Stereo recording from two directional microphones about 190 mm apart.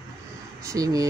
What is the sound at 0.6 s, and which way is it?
Speech, 20° right (ahead or behind).